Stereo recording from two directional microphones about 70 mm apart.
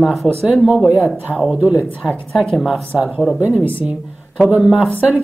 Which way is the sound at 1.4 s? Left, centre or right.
Centre.